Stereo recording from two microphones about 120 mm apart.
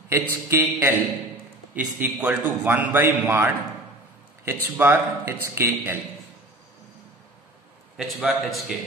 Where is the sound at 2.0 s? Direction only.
10° right (ahead or behind).